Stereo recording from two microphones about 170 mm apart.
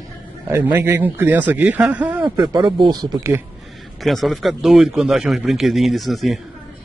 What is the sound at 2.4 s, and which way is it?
Speech, 25° right (ahead or behind).